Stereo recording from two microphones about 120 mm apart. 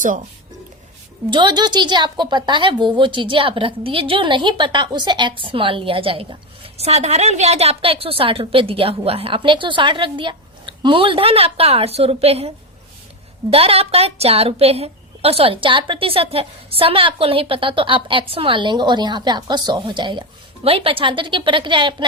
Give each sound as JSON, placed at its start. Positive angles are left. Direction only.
{"t": 1.3, "sound": "a woman's voice", "side_deg": -40}